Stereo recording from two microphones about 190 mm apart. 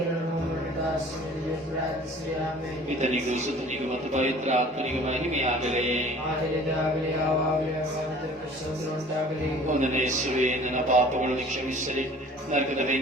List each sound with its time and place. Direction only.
3.0 s a man's voice: 35° right (ahead or behind)
9.8 s a man's voice: 40° right (ahead or behind)
12.5 s a man's voice: 40° right (ahead or behind)